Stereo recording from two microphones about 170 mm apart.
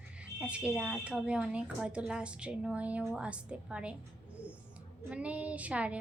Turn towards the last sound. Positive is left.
turn(degrees=-5)  # may be behind; listen again after turning